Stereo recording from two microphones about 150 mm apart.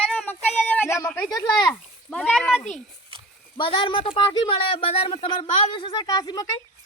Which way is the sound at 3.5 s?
35° left (ahead or behind).